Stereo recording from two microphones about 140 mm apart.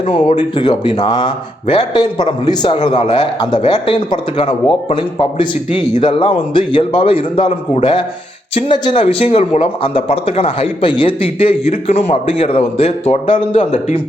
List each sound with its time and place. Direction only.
0.1 s speech: 40° left (ahead or behind)
2.8 s speech: 45° left (ahead or behind)
3.4 s speech: 30° left (ahead or behind)
8.7 s a man's voice: 35° left (ahead or behind)